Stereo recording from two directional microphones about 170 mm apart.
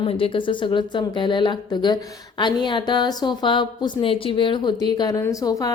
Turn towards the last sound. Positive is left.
turn(degrees=20)  # may be behind; listen again after turning